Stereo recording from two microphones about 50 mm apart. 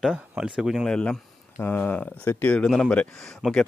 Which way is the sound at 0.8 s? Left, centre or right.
Centre.